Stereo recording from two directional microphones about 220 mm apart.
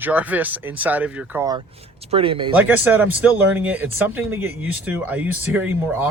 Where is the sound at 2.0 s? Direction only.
25° right (ahead or behind).